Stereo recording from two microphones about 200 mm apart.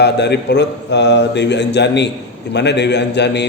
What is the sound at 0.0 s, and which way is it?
A man's voice, 55° left (ahead or behind).